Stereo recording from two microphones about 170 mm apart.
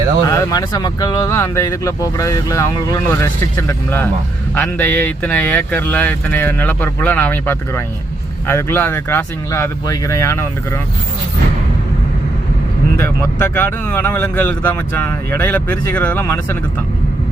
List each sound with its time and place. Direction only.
0.3 s speech: 20° left (ahead or behind)
13.0 s speech: 15° left (ahead or behind)